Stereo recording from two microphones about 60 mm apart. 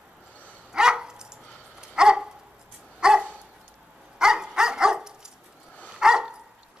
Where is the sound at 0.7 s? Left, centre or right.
Centre.